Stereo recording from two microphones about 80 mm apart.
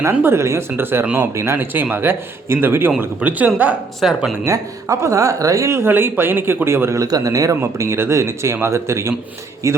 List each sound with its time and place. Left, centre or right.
0.1 s speech: right
1.4 s speech: right
4.0 s speech: centre
4.4 s speech: right
7.0 s speech: right